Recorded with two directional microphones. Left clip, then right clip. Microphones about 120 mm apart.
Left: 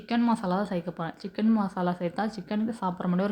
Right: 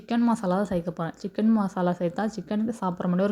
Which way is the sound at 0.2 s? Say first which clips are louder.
Right 3 dB; 45° right (ahead or behind).